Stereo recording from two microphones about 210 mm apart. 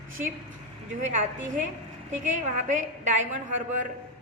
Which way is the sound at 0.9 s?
35° right (ahead or behind).